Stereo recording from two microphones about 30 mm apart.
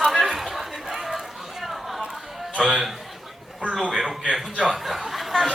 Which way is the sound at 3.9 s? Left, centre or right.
Centre.